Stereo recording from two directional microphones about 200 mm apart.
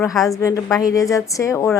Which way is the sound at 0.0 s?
15° left (ahead or behind).